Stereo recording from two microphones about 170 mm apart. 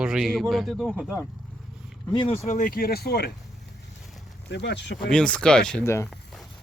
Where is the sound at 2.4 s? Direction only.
50° left (ahead or behind); by 3.3 s 70° left (ahead or behind).